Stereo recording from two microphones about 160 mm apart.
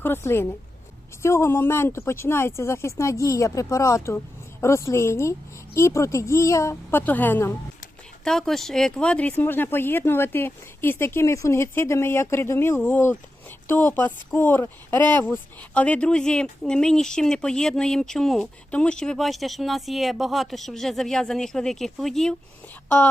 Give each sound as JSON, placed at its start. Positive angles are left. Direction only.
{"t": 0.0, "sound": "speech", "side_deg": 15}